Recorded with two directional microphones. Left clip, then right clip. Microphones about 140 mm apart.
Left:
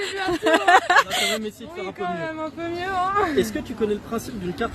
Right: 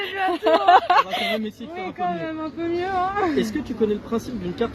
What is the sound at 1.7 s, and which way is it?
Speech, 40° left (ahead or behind).